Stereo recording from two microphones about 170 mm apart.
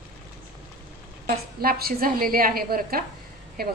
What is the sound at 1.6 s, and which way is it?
A woman's voice, 60° right (ahead or behind).